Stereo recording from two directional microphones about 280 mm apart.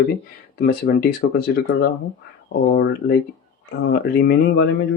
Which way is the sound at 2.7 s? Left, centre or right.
Left.